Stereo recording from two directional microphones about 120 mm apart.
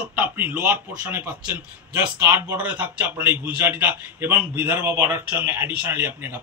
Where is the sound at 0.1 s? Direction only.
15° right (ahead or behind).